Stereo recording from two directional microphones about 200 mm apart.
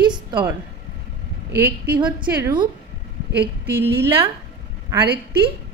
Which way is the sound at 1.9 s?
5° right (ahead or behind).